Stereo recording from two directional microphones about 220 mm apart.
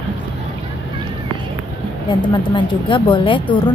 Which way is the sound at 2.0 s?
20° left (ahead or behind).